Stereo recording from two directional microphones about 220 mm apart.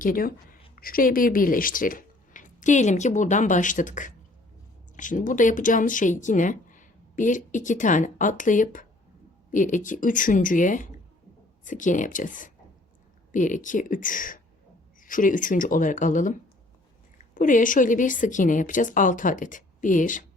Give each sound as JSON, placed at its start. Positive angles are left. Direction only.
{"t": 0.0, "sound": "speech", "side_deg": 40}
{"t": 17.3, "sound": "speech", "side_deg": 35}